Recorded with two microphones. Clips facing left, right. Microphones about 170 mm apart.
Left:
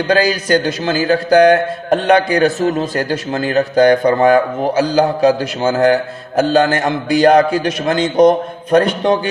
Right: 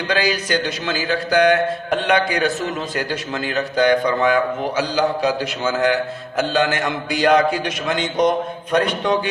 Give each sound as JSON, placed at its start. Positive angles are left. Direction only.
{"t": 0.1, "sound": "a man's voice", "side_deg": 40}